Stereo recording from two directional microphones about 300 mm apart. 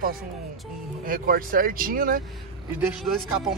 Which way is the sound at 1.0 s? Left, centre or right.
Right.